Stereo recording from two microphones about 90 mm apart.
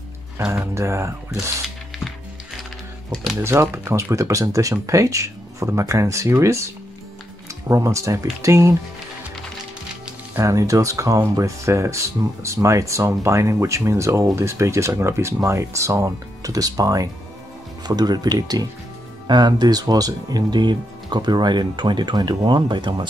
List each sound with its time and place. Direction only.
0.5 s speech: 30° right (ahead or behind)
3.3 s speech: 30° right (ahead or behind)
10.3 s speech: 35° right (ahead or behind); by 23.0 s 60° right (ahead or behind)